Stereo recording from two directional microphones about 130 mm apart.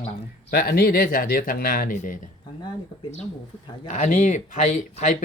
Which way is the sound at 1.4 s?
90° left.